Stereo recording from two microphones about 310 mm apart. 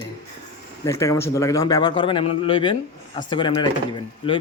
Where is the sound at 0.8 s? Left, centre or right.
Centre.